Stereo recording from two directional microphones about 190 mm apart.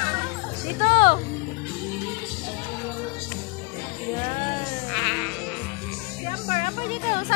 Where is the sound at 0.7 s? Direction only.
25° left (ahead or behind).